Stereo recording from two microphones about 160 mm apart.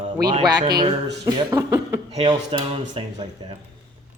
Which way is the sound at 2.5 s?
35° right (ahead or behind).